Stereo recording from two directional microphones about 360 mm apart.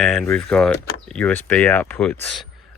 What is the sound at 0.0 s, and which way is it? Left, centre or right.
Speech, centre.